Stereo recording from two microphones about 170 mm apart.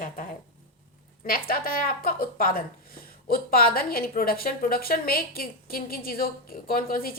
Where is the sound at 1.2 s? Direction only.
60° left (ahead or behind).